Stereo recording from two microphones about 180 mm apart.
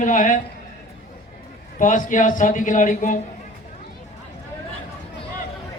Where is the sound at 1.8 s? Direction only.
45° left (ahead or behind).